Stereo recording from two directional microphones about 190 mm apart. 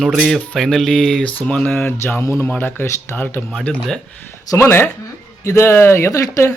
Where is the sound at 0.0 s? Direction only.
Centre (ahead or behind).